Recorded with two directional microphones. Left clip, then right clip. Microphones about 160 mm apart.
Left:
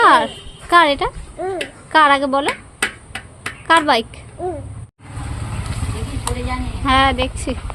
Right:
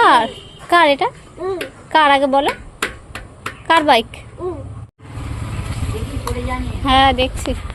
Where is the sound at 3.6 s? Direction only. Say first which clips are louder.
Right 1 dB; centre (ahead or behind).